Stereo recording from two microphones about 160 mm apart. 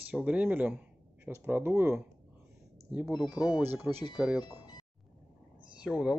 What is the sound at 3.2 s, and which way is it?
Speech, 25° left (ahead or behind).